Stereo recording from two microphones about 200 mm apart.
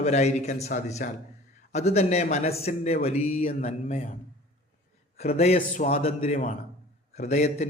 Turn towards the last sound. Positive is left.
turn(degrees=35)  # may be behind; listen again after turning